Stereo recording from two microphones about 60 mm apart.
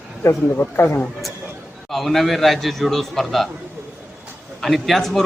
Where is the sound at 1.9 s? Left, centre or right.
Centre.